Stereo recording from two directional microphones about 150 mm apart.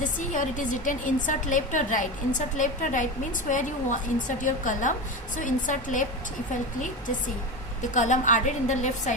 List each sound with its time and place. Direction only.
0.0 s a woman's voice: 60° left (ahead or behind)
7.8 s a woman's voice: 55° left (ahead or behind)